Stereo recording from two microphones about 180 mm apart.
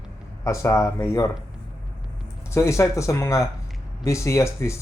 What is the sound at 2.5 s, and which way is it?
A man's voice, 15° left (ahead or behind).